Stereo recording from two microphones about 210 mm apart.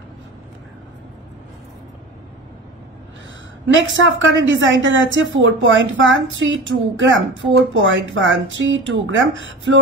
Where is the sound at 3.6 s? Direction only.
65° right (ahead or behind).